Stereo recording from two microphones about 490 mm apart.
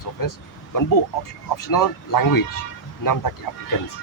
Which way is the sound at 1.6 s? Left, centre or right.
Left.